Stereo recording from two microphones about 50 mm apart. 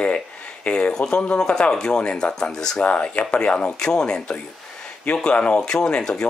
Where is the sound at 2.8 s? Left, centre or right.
Left.